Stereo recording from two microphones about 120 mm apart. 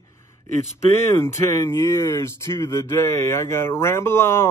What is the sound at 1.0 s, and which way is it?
Speech, 20° left (ahead or behind).